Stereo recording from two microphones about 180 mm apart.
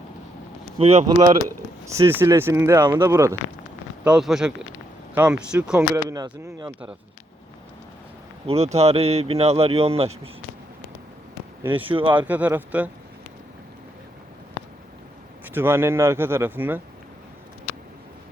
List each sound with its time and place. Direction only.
0.8 s speech: 35° right (ahead or behind)
1.9 s speech: 15° right (ahead or behind)
2.8 s speech: 25° right (ahead or behind)
3.1 s speech: 15° right (ahead or behind)
4.0 s speech: 5° right (ahead or behind)
5.9 s speech: 20° right (ahead or behind)
8.4 s speech: 35° right (ahead or behind)
11.7 s speech: 30° right (ahead or behind)
12.2 s speech: 10° right (ahead or behind)
15.4 s speech: 10° right (ahead or behind)